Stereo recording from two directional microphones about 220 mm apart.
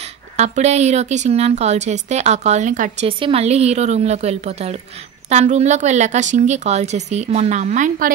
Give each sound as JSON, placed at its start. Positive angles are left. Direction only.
{"t": 0.4, "sound": "a woman's voice", "side_deg": -30}